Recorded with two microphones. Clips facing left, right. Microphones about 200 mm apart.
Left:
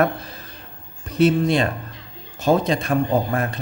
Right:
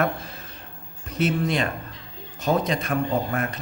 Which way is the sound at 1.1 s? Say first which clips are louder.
Left 6 dB; 30° left (ahead or behind).